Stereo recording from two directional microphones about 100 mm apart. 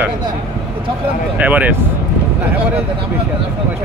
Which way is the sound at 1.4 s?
15° right (ahead or behind).